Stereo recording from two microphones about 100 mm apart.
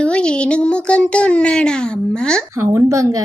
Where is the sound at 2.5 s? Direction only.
30° right (ahead or behind).